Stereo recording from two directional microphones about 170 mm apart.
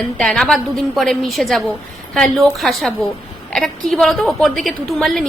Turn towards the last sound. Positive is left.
turn(degrees=0)  # may be behind; listen again after turning